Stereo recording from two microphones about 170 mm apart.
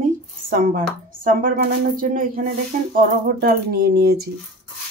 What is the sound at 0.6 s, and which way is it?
Speech, 55° right (ahead or behind).